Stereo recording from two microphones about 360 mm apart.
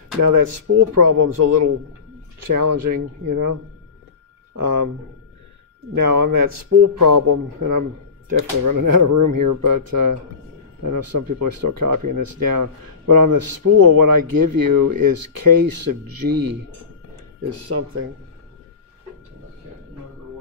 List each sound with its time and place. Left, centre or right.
0.2 s speech: right
6.1 s speech: right
17.7 s speech: right